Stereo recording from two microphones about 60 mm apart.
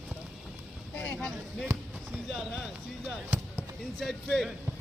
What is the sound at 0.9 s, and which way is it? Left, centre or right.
Speech, left.